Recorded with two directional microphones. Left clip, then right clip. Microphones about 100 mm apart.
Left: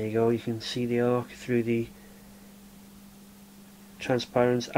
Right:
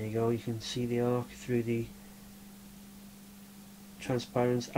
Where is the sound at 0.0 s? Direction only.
20° left (ahead or behind).